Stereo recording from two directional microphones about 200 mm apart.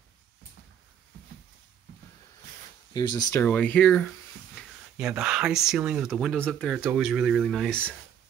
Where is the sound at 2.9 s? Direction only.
20° left (ahead or behind).